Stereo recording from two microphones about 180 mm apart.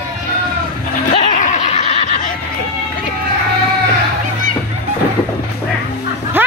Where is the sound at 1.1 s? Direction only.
45° left (ahead or behind).